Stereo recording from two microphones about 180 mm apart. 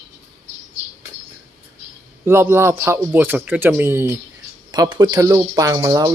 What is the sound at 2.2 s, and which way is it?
Speech, 15° right (ahead or behind).